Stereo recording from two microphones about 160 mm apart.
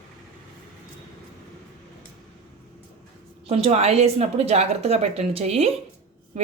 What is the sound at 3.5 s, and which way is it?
Speech, 40° right (ahead or behind).